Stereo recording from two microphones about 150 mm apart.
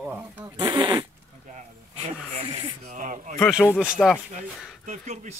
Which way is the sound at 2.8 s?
60° right (ahead or behind).